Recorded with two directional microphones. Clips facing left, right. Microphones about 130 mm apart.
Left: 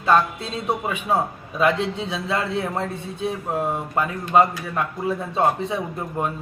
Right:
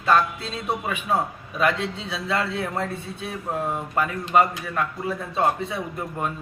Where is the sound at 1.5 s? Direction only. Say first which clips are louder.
Left 3 dB; 20° left (ahead or behind).